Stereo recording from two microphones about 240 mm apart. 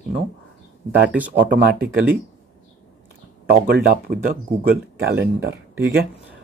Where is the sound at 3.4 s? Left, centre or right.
Right.